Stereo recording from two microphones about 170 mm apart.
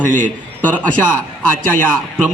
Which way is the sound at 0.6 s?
10° left (ahead or behind).